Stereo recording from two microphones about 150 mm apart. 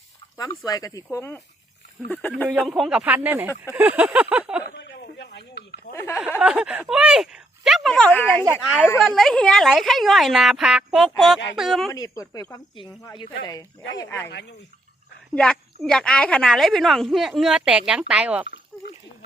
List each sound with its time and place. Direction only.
0.3 s speech: 25° left (ahead or behind); by 2.5 s 10° left (ahead or behind)
2.6 s speech: centre (ahead or behind)
3.6 s a sound: 10° right (ahead or behind)
5.9 s speech: 20° left (ahead or behind)
6.4 s speech: 5° right (ahead or behind); by 8.4 s 10° left (ahead or behind)
8.6 s a woman's voice: 5° right (ahead or behind)
11.9 s speech: 20° left (ahead or behind)
15.4 s a woman's voice: 5° left (ahead or behind)